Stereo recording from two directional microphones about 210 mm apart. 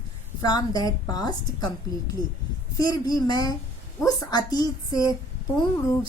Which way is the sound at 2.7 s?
15° left (ahead or behind).